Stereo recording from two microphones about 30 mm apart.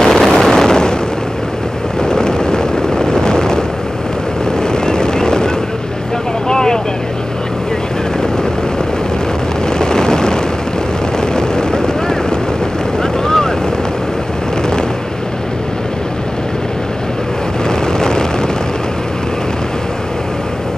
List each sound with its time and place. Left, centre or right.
0.0 s vehicle: centre
2.0 s vehicle: left
4.7 s vehicle: left
6.5 s vehicle: left
9.8 s vehicle: left
17.6 s vehicle: left